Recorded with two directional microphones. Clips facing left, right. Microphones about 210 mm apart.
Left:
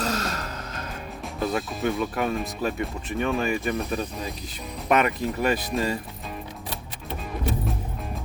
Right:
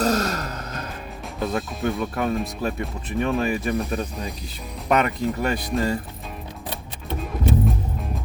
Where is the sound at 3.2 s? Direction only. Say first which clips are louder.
Right 2 dB; 35° right (ahead or behind).